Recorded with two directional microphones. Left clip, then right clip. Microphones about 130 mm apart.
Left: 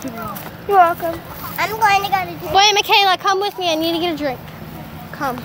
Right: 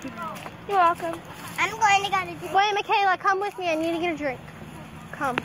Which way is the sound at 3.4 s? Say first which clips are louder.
Left 7 dB; 20° left (ahead or behind).